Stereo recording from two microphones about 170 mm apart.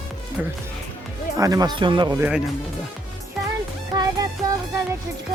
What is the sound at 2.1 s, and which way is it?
Speech, 10° right (ahead or behind).